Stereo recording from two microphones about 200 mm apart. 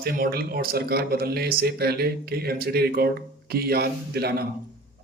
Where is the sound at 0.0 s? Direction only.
50° right (ahead or behind).